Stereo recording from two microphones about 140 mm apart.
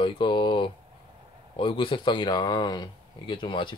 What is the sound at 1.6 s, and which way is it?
Speech, 40° left (ahead or behind).